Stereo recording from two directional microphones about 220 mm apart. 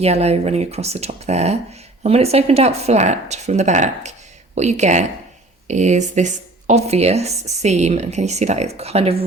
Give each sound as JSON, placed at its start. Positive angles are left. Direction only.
{"t": 0.0, "sound": "speech", "side_deg": -30}